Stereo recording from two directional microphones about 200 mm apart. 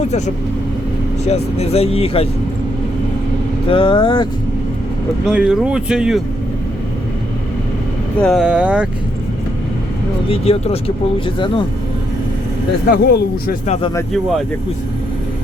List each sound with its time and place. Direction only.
1.2 s speech: 30° left (ahead or behind)
3.7 s speech: 25° left (ahead or behind)
5.2 s speech: 5° right (ahead or behind)
8.2 s speech: centre (ahead or behind)
10.2 s speech: 30° left (ahead or behind)
12.9 s speech: 50° left (ahead or behind)
14.1 s speech: centre (ahead or behind)